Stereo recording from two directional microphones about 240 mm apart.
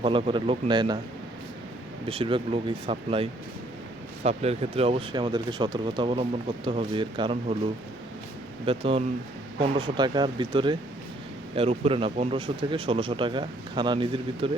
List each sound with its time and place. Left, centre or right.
0.0 s speech: right
2.0 s speech: right
8.6 s speech: right